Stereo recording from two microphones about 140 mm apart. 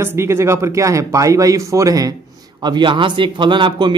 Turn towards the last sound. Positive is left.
turn(degrees=-35)  # may be behind; listen again after turning